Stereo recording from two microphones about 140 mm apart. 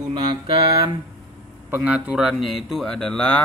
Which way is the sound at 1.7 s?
10° right (ahead or behind).